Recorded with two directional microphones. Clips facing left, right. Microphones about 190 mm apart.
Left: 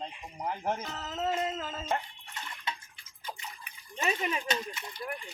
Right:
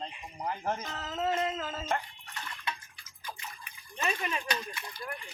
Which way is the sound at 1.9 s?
20° left (ahead or behind).